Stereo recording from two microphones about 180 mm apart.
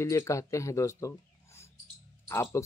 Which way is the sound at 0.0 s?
15° left (ahead or behind).